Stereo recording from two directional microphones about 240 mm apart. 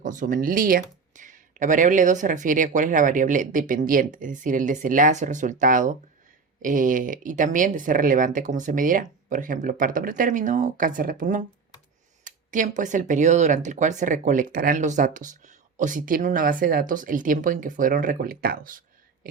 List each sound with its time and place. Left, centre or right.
0.0 s speech: right
19.2 s whispering: right